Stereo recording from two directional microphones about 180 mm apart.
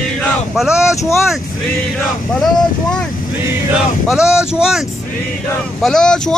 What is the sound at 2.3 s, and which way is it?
Speech, 5° left (ahead or behind).